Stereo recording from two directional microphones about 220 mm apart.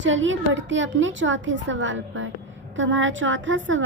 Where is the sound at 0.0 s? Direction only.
60° right (ahead or behind).